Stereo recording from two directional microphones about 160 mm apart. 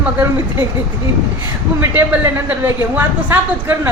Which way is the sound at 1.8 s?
10° right (ahead or behind).